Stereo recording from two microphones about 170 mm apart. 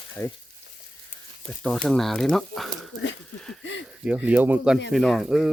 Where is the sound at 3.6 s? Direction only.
90° left.